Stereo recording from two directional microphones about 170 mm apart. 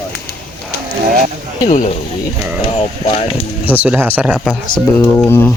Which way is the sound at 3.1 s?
35° left (ahead or behind).